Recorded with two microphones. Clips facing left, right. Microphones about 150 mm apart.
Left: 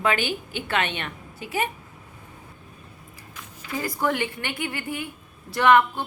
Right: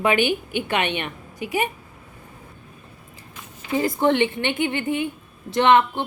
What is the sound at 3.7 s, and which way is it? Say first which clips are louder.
A woman's voice: right 6 dB; 25° right (ahead or behind).